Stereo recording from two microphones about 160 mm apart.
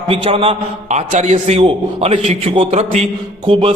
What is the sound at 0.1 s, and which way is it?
A man's voice, 35° right (ahead or behind).